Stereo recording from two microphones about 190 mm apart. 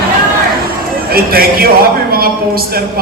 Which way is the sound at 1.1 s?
50° right (ahead or behind).